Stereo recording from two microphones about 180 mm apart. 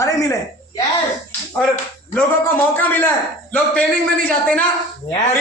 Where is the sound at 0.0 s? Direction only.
15° left (ahead or behind).